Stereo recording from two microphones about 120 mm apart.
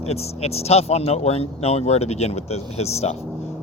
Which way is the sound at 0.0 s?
60° left (ahead or behind).